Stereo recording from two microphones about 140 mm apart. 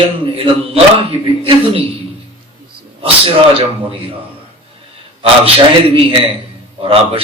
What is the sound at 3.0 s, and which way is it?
Speech, 40° right (ahead or behind).